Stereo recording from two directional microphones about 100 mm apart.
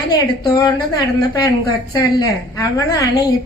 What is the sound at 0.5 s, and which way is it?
A woman's voice, 40° left (ahead or behind).